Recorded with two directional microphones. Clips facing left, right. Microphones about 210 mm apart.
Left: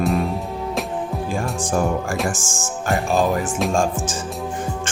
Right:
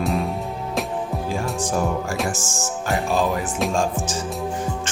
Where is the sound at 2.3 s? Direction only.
50° left (ahead or behind).